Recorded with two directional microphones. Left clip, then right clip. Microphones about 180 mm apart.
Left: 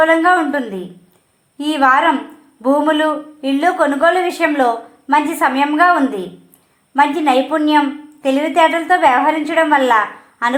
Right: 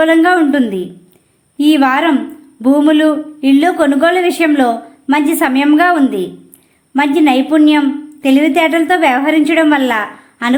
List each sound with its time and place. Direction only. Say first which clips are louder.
0.0 s a woman's voice: right 2 dB; 30° right (ahead or behind)